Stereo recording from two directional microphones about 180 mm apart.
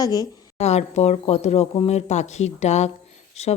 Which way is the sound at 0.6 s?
35° left (ahead or behind).